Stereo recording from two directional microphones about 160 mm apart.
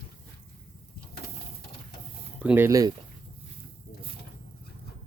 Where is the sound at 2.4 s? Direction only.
15° right (ahead or behind).